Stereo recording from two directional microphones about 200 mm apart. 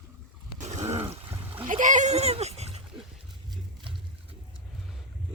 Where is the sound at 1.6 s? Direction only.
40° right (ahead or behind).